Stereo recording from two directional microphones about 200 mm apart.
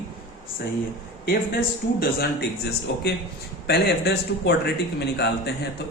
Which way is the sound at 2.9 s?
60° left (ahead or behind).